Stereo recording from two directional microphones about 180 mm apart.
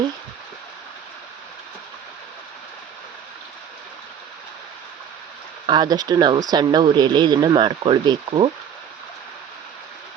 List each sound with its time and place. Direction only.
5.6 s speech: 25° right (ahead or behind)